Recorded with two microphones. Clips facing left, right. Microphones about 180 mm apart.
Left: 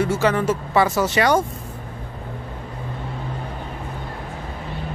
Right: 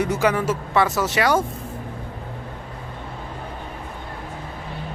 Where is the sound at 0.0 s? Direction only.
15° right (ahead or behind).